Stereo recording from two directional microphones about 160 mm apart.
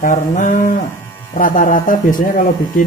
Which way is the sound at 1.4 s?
55° left (ahead or behind).